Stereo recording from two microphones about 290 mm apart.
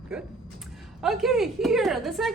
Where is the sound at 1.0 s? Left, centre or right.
Centre.